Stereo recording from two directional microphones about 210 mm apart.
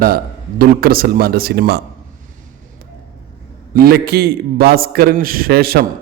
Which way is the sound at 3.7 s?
50° right (ahead or behind).